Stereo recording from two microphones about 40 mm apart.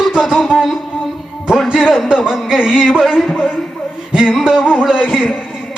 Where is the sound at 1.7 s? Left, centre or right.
Centre.